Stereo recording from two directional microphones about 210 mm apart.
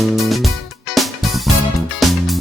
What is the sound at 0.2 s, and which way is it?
Music, centre (ahead or behind).